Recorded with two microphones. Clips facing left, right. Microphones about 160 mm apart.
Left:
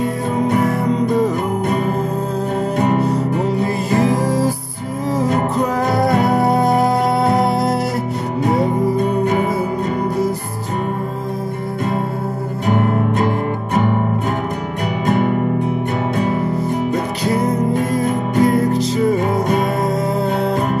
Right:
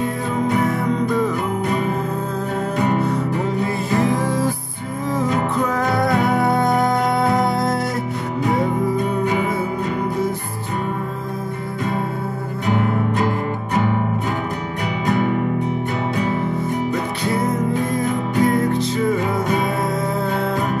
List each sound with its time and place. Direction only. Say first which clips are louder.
0.6 s music: left 3 dB; 40° left (ahead or behind)
15.0 s music: left 3 dB; 50° left (ahead or behind)
17.2 s music: left 3 dB; 40° left (ahead or behind)